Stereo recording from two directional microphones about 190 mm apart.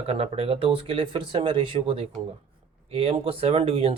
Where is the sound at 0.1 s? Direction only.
30° right (ahead or behind).